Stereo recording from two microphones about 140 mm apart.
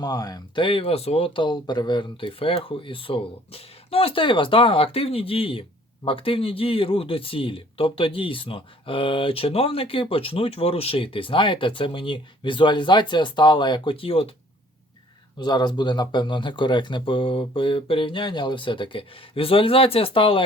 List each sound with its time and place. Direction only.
0.0 s speech: 30° left (ahead or behind)
15.4 s speech: 30° left (ahead or behind)